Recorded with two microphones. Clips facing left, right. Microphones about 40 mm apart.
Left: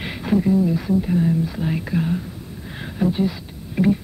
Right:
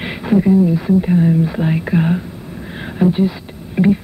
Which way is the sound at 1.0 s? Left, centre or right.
Right.